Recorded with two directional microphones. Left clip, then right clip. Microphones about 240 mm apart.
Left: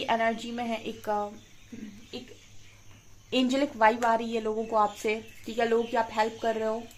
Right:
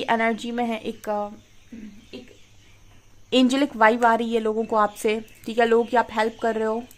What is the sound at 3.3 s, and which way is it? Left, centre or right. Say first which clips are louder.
Speech: right 6 dB; right.